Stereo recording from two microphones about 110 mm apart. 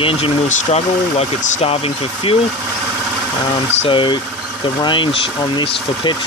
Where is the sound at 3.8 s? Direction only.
45° left (ahead or behind).